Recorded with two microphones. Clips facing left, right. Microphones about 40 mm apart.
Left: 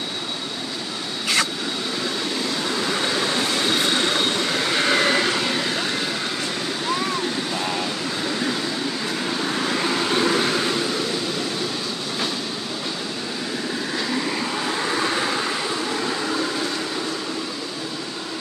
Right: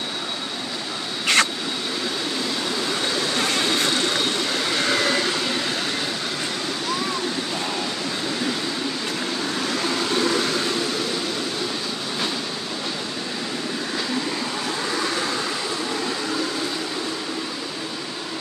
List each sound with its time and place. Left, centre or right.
1.2 s vehicle: right
4.7 s vehicle: left
9.8 s vehicle: left
15.0 s vehicle: left